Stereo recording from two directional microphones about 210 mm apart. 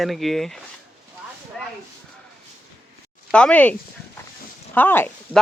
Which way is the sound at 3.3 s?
5° left (ahead or behind).